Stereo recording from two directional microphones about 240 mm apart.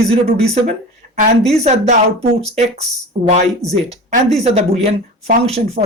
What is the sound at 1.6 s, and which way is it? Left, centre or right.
Speech, right.